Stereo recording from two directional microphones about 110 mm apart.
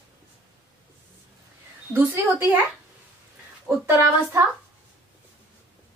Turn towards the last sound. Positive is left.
turn(degrees=-20)  # may be behind; listen again after turning